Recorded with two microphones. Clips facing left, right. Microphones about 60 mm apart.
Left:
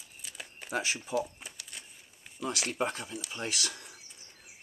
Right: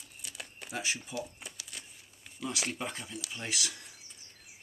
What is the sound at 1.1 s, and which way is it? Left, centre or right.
Shuffling cards, centre.